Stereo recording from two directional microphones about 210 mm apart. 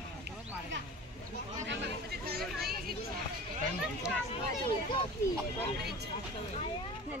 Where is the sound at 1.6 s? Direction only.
50° right (ahead or behind).